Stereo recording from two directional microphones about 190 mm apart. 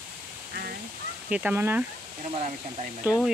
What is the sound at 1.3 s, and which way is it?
Speech, 10° right (ahead or behind).